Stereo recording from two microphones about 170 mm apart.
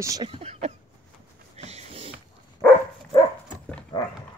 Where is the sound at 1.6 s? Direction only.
40° right (ahead or behind).